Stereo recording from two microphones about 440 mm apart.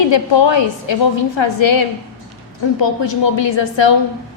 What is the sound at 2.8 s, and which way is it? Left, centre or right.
A woman's voice, left.